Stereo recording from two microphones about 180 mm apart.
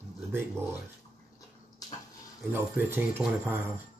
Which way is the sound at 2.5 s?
10° right (ahead or behind).